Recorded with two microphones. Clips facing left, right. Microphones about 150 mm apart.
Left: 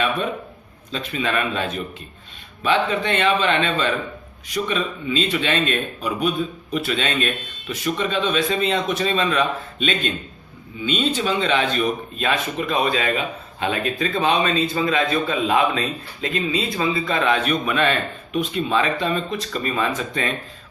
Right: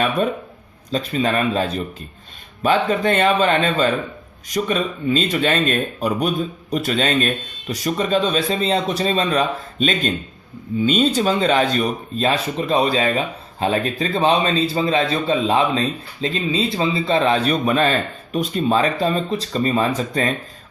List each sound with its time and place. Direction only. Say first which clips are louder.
0.9 s speech: right 5 dB; 35° right (ahead or behind)